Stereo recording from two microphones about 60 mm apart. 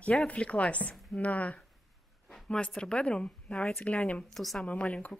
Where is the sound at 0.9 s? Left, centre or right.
Centre.